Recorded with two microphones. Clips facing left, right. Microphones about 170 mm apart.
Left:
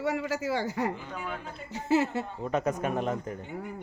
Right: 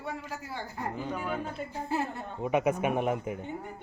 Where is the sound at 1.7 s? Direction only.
90° left.